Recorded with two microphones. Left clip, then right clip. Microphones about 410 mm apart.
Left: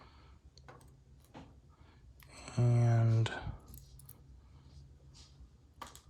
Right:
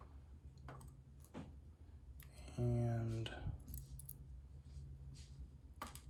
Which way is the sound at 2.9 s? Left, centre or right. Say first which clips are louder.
Left 10 dB; centre.